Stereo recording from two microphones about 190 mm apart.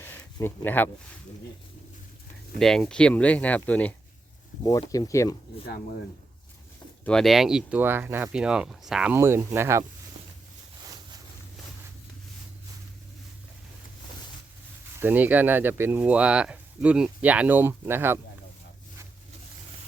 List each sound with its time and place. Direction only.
0.0 s a sound: 10° left (ahead or behind)
2.6 s speech: centre (ahead or behind)
4.6 s speech: 20° left (ahead or behind)
7.0 s speech: 5° left (ahead or behind); by 9.8 s 15° right (ahead or behind)
14.9 s speech: 10° right (ahead or behind)